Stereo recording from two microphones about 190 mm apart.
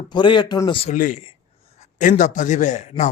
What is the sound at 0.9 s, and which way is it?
Speech, 40° left (ahead or behind).